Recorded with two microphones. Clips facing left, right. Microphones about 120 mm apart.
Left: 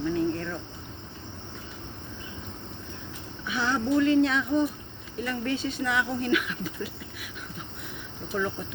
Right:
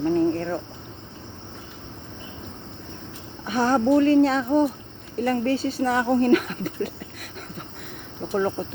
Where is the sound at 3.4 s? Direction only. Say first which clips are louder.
Right 7 dB; 45° right (ahead or behind).